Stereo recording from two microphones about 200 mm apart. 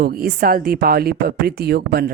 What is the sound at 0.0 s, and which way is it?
Speech, 50° right (ahead or behind).